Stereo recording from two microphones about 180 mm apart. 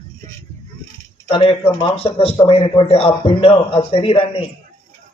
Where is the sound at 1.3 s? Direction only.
30° left (ahead or behind).